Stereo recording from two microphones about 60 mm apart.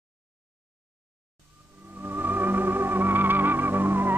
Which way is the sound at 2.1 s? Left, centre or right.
Right.